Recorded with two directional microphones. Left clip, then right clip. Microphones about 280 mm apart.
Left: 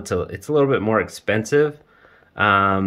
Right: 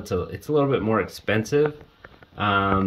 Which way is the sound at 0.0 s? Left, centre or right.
Centre.